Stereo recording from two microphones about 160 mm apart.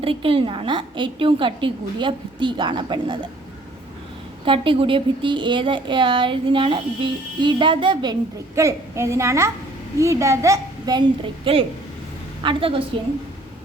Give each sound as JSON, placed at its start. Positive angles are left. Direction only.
{"t": 0.0, "sound": "speech", "side_deg": -35}
{"t": 4.4, "sound": "speech", "side_deg": -35}
{"t": 8.5, "sound": "a child's voice", "side_deg": -20}
{"t": 11.5, "sound": "speech", "side_deg": -35}